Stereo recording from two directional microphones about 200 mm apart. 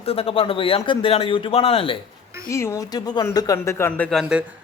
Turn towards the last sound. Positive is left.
turn(degrees=0)  # may be behind; listen again after turning